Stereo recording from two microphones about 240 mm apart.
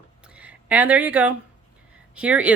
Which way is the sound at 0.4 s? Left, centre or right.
Centre.